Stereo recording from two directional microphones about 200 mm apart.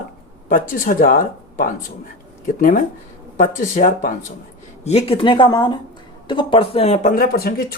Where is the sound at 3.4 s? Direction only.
40° left (ahead or behind).